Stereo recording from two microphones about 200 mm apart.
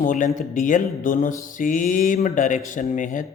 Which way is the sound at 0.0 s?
40° left (ahead or behind).